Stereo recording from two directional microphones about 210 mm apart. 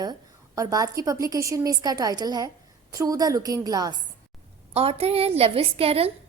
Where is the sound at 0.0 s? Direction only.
15° right (ahead or behind).